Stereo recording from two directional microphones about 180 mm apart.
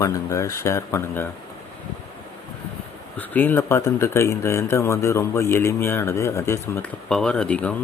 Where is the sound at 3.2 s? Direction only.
10° left (ahead or behind).